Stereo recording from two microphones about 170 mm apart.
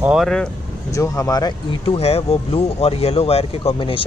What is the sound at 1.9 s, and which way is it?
Speech, 35° left (ahead or behind).